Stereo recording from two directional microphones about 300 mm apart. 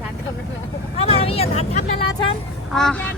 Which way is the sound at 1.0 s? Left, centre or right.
Centre.